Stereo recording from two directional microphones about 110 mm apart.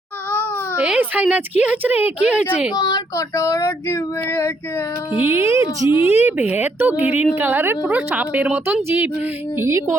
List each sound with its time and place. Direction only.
0.8 s a woman's voice: 15° right (ahead or behind)
2.7 s child singing: 35° left (ahead or behind)
5.2 s speech: 25° right (ahead or behind)
5.9 s speech: 55° left (ahead or behind)
6.1 s a woman's voice: 20° right (ahead or behind)